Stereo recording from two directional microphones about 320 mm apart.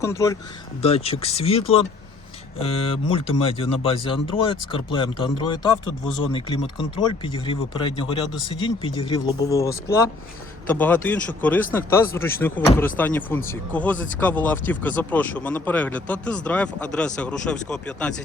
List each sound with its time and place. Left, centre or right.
0.0 s a man's voice: centre